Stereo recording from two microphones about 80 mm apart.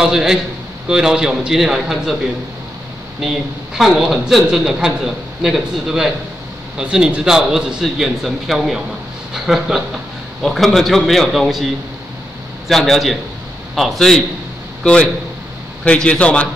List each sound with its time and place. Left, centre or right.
0.0 s a man's voice: centre
3.2 s a man's voice: centre